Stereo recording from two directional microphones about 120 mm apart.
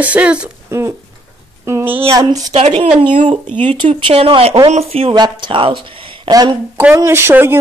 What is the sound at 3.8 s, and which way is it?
A woman's voice, 50° right (ahead or behind).